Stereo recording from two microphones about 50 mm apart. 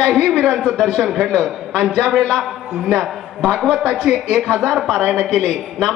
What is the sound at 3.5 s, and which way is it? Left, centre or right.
A man's voice, centre.